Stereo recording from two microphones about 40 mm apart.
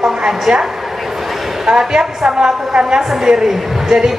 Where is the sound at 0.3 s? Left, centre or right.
Centre.